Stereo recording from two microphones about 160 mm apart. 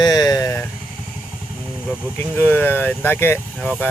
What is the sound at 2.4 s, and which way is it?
Speech, 15° left (ahead or behind).